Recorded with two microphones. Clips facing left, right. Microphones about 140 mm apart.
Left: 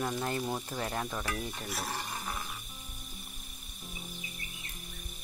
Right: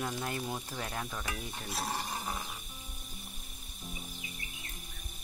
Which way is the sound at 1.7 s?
25° right (ahead or behind).